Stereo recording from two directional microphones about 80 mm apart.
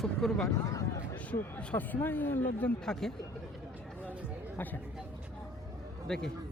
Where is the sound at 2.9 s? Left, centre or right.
Centre.